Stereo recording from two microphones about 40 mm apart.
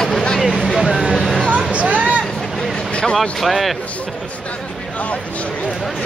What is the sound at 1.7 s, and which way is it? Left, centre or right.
Vehicle, right.